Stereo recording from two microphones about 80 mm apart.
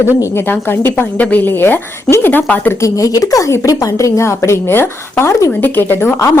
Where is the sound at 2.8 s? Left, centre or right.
Left.